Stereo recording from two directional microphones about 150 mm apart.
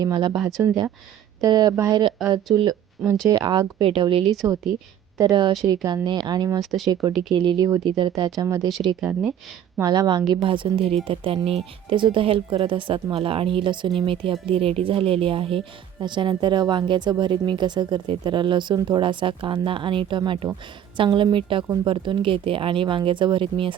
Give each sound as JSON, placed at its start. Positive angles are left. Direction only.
{"t": 0.0, "sound": "speech", "side_deg": -25}
{"t": 2.2, "sound": "speech", "side_deg": 0}
{"t": 3.1, "sound": "speech", "side_deg": -25}
{"t": 4.4, "sound": "speech", "side_deg": -20}
{"t": 5.1, "sound": "speech", "side_deg": -30}
{"t": 9.0, "sound": "speech", "side_deg": -10}
{"t": 9.8, "sound": "a woman's voice", "side_deg": -25}